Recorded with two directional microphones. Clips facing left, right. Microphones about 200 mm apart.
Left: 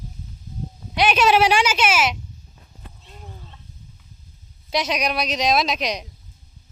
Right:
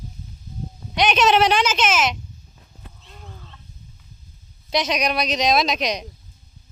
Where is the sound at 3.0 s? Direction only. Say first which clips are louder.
Left 1 dB; 15° left (ahead or behind).